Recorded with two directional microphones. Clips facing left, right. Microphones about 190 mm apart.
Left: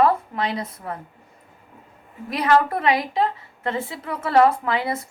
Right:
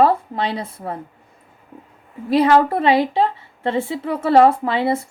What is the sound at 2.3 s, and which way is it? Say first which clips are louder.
Speech: right 5 dB; 30° right (ahead or behind).